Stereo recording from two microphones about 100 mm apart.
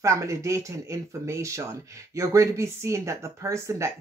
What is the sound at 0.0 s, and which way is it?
Speech, 30° right (ahead or behind).